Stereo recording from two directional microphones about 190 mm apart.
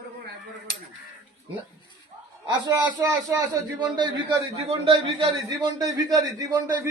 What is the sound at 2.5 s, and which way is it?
A man's voice, 20° right (ahead or behind).